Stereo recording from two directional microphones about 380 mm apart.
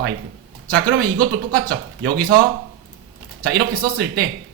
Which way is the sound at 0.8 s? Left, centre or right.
Right.